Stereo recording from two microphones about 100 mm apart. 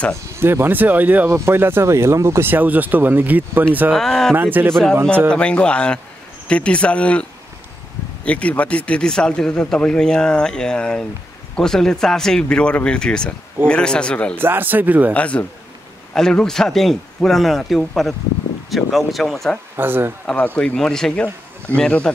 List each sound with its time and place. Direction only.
0.1 s speech: 30° right (ahead or behind)
3.9 s a man's voice: 5° left (ahead or behind)
4.4 s speech: 20° right (ahead or behind)
5.3 s speech: 10° left (ahead or behind)
8.3 s speech: 15° left (ahead or behind)
14.3 s speech: 20° right (ahead or behind)
15.1 s a man's voice: 15° left (ahead or behind)
19.8 s speech: 20° right (ahead or behind)
20.2 s speech: 15° left (ahead or behind)